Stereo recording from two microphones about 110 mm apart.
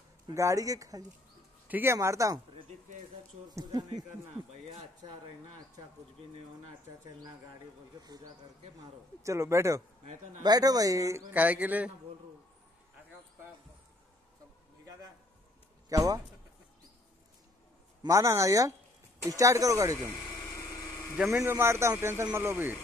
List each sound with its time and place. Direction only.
0.3 s speech: 30° right (ahead or behind)
1.7 s speech: 20° right (ahead or behind)
3.5 s speech: 35° right (ahead or behind)
8.0 s speech: 35° right (ahead or behind)
11.3 s speech: 15° right (ahead or behind)
15.9 s speech: 30° right (ahead or behind)
18.0 s speech: 30° right (ahead or behind)
21.3 s speech: 25° right (ahead or behind)